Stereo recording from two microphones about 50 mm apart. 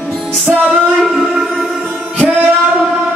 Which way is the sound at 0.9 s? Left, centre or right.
Centre.